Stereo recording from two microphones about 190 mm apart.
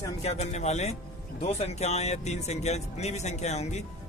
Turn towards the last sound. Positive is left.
turn(degrees=35)  # may be behind; listen again after turning